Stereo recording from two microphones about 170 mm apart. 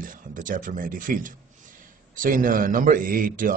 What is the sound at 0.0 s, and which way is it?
A man's voice, 50° right (ahead or behind).